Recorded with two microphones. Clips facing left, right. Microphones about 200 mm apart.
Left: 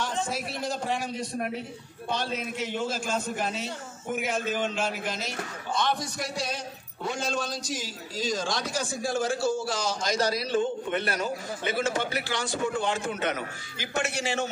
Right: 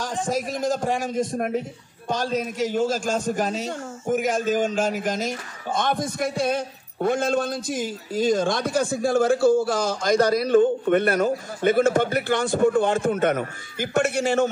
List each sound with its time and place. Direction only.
0.3 s a man's voice: 45° right (ahead or behind)